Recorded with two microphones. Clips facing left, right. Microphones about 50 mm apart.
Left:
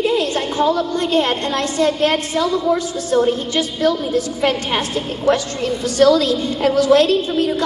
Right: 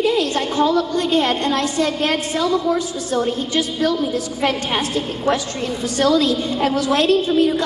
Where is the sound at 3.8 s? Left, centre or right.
Left.